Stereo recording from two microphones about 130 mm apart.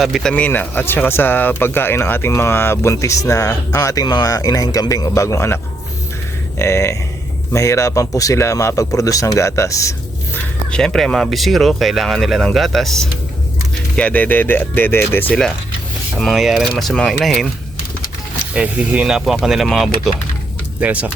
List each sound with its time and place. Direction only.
0.0 s speech: centre (ahead or behind); by 5.5 s 20° left (ahead or behind)
6.6 s speech: 20° left (ahead or behind)
10.7 s speech: 5° left (ahead or behind)
16.1 s speech: centre (ahead or behind)
18.5 s speech: 10° right (ahead or behind)
20.8 s speech: 10° right (ahead or behind)